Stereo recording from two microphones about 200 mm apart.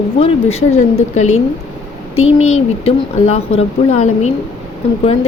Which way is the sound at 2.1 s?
90° left.